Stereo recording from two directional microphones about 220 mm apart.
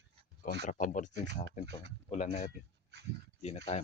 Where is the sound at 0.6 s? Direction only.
35° left (ahead or behind).